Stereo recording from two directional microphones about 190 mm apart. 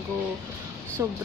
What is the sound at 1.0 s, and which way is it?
Speech, 15° right (ahead or behind).